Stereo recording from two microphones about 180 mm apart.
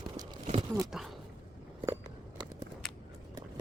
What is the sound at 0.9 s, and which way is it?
Speech, centre (ahead or behind).